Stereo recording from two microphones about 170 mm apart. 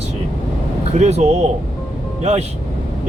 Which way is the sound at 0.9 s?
40° right (ahead or behind).